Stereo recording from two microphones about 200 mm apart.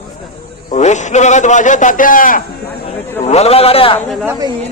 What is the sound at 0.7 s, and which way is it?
A man's voice, 35° left (ahead or behind).